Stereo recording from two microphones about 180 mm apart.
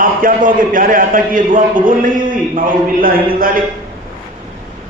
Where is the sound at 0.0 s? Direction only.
50° right (ahead or behind).